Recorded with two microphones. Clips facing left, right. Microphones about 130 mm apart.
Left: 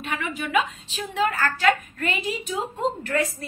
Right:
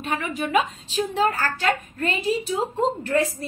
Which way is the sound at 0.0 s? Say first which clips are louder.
Right 3 dB; 40° right (ahead or behind).